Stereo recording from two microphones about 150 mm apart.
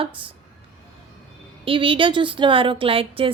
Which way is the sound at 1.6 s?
35° right (ahead or behind).